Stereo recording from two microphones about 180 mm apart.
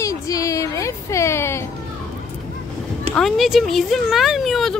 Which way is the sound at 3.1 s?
Centre (ahead or behind).